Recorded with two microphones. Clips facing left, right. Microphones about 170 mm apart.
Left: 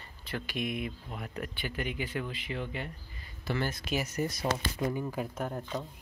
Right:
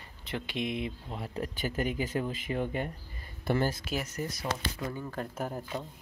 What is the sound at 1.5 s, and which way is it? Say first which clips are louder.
Speech: right 5 dB; 40° right (ahead or behind).